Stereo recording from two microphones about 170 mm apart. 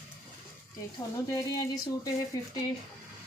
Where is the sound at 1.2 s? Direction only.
20° left (ahead or behind).